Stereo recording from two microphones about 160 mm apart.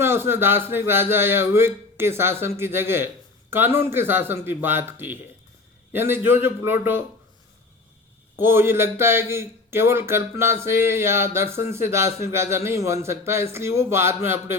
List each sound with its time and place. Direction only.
0.0 s speech: 15° right (ahead or behind)
8.4 s speech: 15° right (ahead or behind)